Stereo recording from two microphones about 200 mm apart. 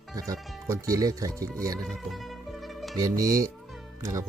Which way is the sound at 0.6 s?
15° right (ahead or behind).